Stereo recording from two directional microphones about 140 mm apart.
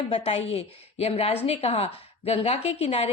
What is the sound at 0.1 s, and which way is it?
Speech, 45° left (ahead or behind).